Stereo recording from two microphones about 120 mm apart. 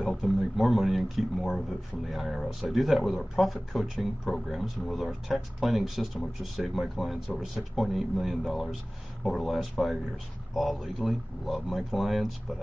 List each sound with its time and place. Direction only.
0.0 s speech: centre (ahead or behind)